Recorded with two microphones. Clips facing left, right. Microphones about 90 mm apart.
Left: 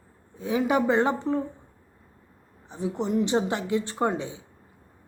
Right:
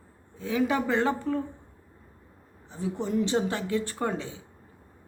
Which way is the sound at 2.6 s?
20° left (ahead or behind).